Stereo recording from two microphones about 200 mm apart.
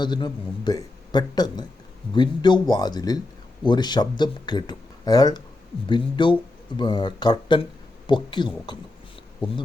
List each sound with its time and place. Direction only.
0.0 s speech: 20° left (ahead or behind)